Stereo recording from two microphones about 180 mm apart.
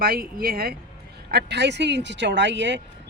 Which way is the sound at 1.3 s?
65° right (ahead or behind).